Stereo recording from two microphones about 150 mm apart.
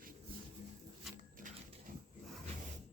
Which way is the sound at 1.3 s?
60° right (ahead or behind).